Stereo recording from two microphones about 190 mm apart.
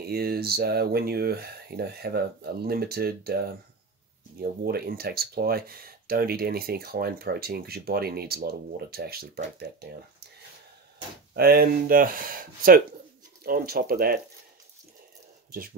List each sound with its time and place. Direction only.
0.0 s speech: 55° right (ahead or behind)
11.3 s speech: 50° right (ahead or behind)